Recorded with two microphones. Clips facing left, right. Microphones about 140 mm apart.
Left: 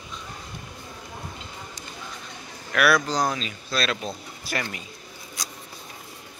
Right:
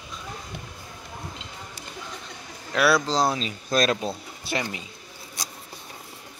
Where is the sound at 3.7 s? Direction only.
40° right (ahead or behind).